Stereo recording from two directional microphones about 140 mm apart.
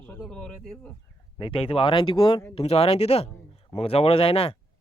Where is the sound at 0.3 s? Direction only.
5° left (ahead or behind).